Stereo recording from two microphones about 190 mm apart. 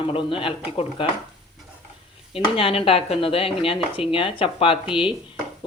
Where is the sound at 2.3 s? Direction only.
30° left (ahead or behind).